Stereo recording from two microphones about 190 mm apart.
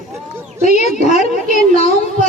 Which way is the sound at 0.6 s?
35° left (ahead or behind).